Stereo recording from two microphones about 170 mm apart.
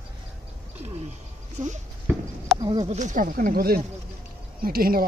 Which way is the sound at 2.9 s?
45° right (ahead or behind).